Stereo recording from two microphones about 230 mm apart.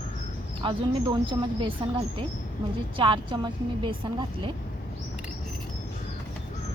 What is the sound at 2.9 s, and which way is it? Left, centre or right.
A woman's voice, right.